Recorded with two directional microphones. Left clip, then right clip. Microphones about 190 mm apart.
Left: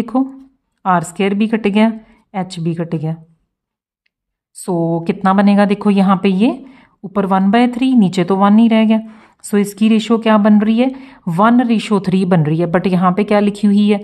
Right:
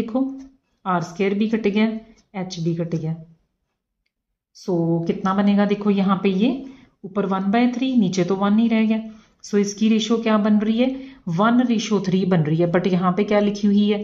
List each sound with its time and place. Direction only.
0.1 s a woman's voice: 40° left (ahead or behind)
4.6 s a woman's voice: 50° left (ahead or behind)